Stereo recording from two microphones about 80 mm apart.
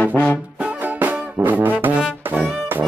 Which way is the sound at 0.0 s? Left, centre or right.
Left.